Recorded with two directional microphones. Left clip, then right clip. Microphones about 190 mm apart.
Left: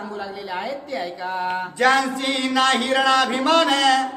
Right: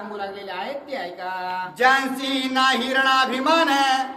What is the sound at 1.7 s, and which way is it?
Speech, 15° right (ahead or behind).